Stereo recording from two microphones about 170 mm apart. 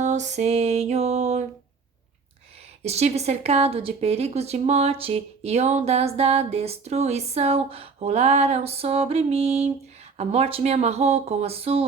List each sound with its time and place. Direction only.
0.0 s a woman's voice: 45° right (ahead or behind)
2.8 s a woman's voice: 40° right (ahead or behind)